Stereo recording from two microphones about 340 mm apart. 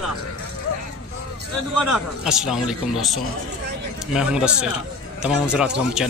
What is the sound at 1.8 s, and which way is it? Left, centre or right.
Speech, centre.